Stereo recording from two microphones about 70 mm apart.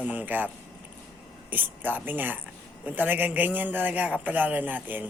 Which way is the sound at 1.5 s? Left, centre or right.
Right.